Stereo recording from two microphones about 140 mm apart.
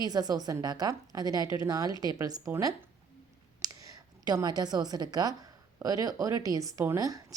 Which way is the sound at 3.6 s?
25° right (ahead or behind).